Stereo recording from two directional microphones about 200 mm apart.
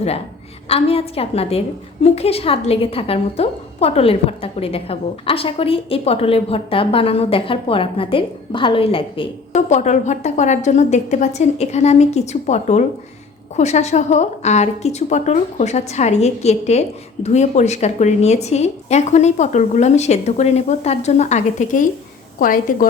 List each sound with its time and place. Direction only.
0.7 s a woman's voice: 30° left (ahead or behind); by 22.9 s 45° left (ahead or behind)